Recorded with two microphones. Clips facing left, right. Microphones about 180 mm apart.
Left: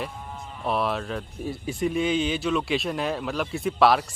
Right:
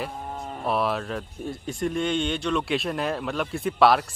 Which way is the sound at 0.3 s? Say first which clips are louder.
Right 5 dB; 45° right (ahead or behind).